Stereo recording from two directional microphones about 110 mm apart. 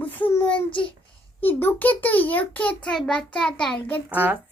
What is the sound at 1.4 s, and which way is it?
A child's voice, 20° left (ahead or behind).